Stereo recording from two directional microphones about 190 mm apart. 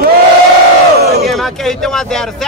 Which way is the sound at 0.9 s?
60° right (ahead or behind).